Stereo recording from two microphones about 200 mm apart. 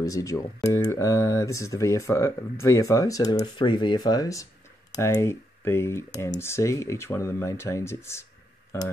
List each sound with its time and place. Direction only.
0.0 s speech: 15° left (ahead or behind)